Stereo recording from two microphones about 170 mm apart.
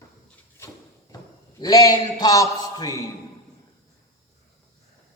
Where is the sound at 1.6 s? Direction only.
20° left (ahead or behind).